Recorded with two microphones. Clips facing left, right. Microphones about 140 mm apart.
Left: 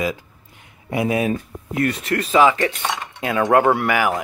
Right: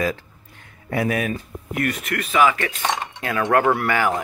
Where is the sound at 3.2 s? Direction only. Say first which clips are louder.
Left 4 dB; 15° left (ahead or behind).